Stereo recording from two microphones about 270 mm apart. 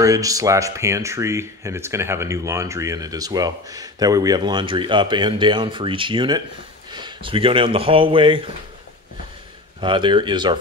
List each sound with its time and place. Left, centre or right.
0.0 s speech: centre
9.8 s speech: centre